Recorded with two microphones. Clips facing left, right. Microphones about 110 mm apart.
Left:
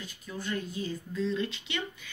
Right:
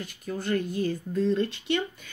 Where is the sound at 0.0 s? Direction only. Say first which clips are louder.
Right 6 dB; 55° right (ahead or behind).